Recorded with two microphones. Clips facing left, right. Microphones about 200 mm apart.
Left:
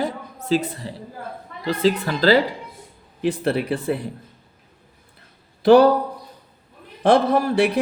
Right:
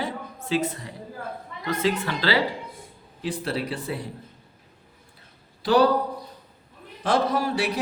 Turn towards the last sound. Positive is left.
turn(degrees=55)  # may be behind; listen again after turning